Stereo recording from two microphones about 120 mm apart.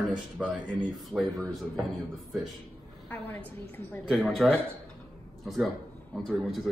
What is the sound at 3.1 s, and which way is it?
Speech, 15° left (ahead or behind).